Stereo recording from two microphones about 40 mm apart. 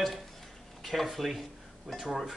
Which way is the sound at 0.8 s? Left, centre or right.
Centre.